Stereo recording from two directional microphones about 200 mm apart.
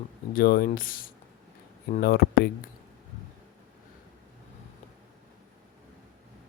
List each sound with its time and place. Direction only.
0.3 s speech: 45° left (ahead or behind)